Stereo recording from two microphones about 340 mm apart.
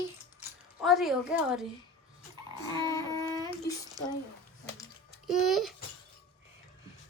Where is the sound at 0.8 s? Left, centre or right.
Centre.